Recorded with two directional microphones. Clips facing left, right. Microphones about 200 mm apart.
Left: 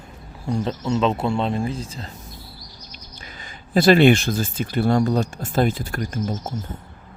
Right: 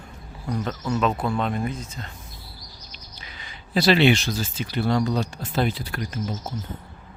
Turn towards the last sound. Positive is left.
turn(degrees=45)  # may be behind; listen again after turning